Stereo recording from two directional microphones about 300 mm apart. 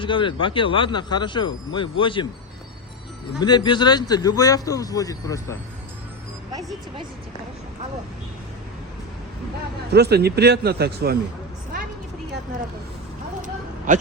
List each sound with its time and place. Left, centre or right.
0.0 s speech: centre
3.4 s speech: centre
9.9 s a man's voice: right
13.4 s a sound: right